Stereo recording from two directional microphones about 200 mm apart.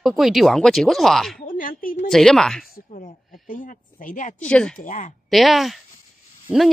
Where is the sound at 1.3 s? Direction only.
40° left (ahead or behind).